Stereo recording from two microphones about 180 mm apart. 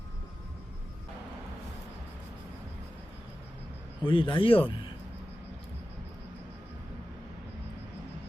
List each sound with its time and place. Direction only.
4.0 s a man's voice: 25° left (ahead or behind)